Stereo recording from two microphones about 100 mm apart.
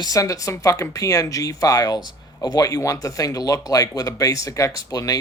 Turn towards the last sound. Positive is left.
turn(degrees=35)  # may be behind; listen again after turning